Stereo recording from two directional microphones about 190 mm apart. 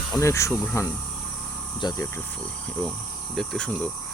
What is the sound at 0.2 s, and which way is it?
Speech, 15° left (ahead or behind).